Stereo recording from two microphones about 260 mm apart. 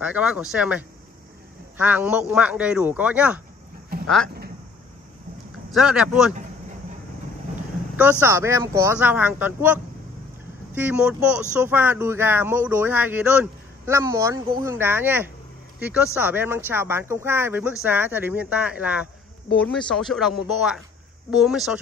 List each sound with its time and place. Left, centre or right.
0.0 s speech: centre
3.9 s a sound: right
5.7 s speech: centre
7.9 s speech: centre